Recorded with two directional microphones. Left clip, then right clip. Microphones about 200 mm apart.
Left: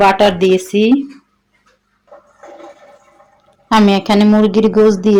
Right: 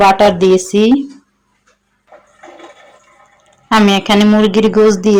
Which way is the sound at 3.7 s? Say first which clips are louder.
Right 1 dB; 5° left (ahead or behind).